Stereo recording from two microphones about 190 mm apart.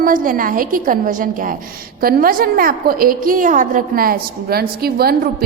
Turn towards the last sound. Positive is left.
turn(degrees=-55)  # may be behind; listen again after turning